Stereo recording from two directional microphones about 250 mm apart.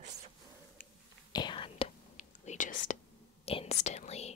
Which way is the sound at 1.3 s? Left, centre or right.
Centre.